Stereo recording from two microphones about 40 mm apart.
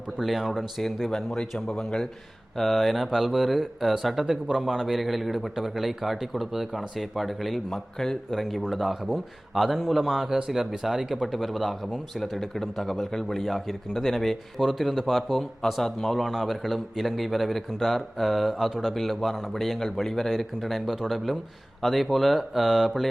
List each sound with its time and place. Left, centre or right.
0.2 s a man's voice: centre
1.6 s a man's voice: centre
7.9 s a man's voice: centre
8.3 s a man's voice: centre
10.3 s speech: centre
10.6 s a man's voice: centre
11.9 s a man's voice: centre